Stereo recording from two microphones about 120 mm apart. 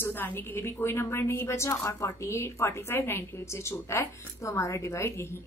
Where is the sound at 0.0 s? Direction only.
20° left (ahead or behind).